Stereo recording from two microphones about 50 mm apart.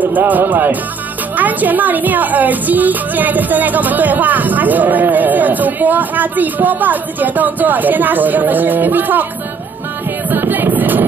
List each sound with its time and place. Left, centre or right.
0.0 s speech: right
10.3 s music: right